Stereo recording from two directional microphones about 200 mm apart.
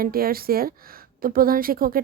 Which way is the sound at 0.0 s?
50° right (ahead or behind).